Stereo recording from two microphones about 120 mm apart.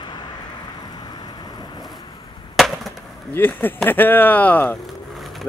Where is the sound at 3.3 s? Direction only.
15° left (ahead or behind).